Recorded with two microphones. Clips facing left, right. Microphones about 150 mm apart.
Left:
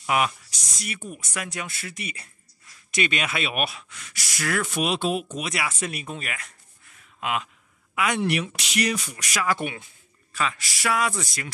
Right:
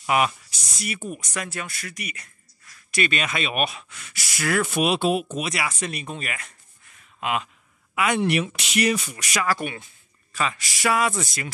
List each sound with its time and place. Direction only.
0.0 s speech: centre (ahead or behind)
1.3 s speech: 10° left (ahead or behind); by 2.2 s 25° left (ahead or behind)
2.9 s speech: 15° left (ahead or behind); by 9.5 s centre (ahead or behind)
9.5 s speech: 15° left (ahead or behind)
10.3 s speech: centre (ahead or behind)